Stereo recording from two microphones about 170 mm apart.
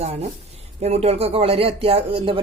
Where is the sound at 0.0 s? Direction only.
40° right (ahead or behind).